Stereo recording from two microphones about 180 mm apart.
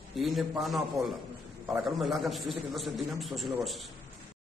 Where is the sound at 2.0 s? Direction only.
Centre (ahead or behind).